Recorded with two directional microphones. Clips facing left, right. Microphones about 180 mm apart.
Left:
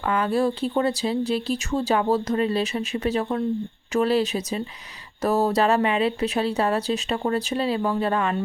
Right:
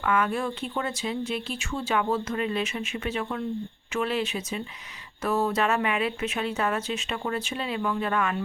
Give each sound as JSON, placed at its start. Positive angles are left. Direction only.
{"t": 0.0, "sound": "speech", "side_deg": 30}